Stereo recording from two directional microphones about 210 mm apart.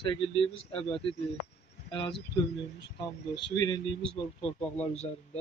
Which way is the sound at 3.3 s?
20° left (ahead or behind).